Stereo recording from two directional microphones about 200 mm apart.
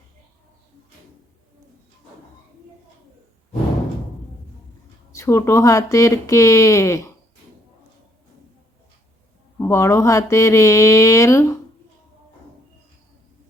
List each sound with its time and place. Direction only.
5.1 s speech: 15° left (ahead or behind)
9.6 s speech: 15° left (ahead or behind)